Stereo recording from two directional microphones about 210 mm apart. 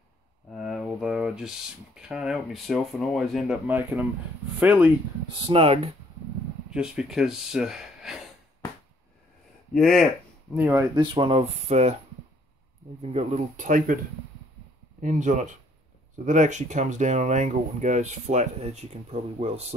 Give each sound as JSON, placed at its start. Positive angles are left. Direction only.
{"t": 0.5, "sound": "speech", "side_deg": 0}
{"t": 5.3, "sound": "speech", "side_deg": -25}
{"t": 6.7, "sound": "speech", "side_deg": -5}
{"t": 9.8, "sound": "speech", "side_deg": 0}
{"t": 10.5, "sound": "speech", "side_deg": -10}
{"t": 11.0, "sound": "speech", "side_deg": -25}
{"t": 13.0, "sound": "speech", "side_deg": -30}
{"t": 15.0, "sound": "speech", "side_deg": -35}